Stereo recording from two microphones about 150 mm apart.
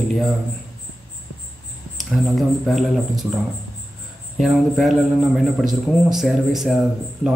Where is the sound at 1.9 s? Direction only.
Centre (ahead or behind).